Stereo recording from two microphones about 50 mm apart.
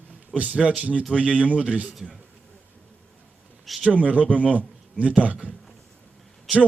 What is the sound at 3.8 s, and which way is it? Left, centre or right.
A man's voice, right.